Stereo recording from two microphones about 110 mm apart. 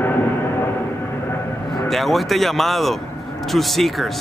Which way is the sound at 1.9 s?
Centre (ahead or behind).